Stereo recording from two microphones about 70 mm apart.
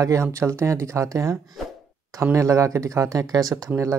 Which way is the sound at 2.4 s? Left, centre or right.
Right.